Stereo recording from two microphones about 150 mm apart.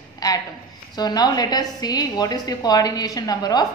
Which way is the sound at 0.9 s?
25° left (ahead or behind).